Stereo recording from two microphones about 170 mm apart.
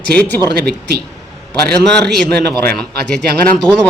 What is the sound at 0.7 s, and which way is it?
Speech, 70° right (ahead or behind).